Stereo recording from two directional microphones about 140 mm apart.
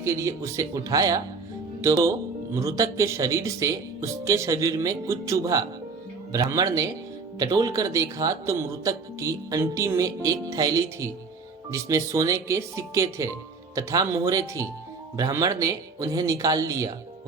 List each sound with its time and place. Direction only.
0.0 s speech: 20° right (ahead or behind)